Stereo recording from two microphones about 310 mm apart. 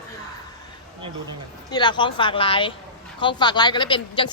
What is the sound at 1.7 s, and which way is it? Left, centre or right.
A woman's voice, centre.